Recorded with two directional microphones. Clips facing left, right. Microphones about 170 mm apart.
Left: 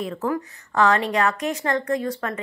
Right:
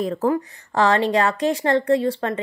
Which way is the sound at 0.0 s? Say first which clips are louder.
Right 5 dB; 35° right (ahead or behind).